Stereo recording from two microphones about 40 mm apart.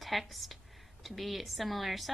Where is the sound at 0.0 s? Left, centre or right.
Centre.